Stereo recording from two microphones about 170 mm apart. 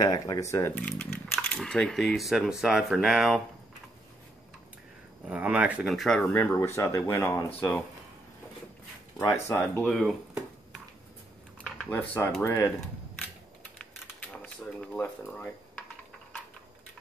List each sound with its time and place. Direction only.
0.0 s speech: 20° left (ahead or behind); by 3.4 s centre (ahead or behind)
5.3 s speech: 5° right (ahead or behind); by 7.4 s 15° left (ahead or behind)
9.2 s speech: 20° left (ahead or behind)
9.6 s speech: centre (ahead or behind)
11.9 s speech: 10° left (ahead or behind)
14.3 s dishes: 5° left (ahead or behind)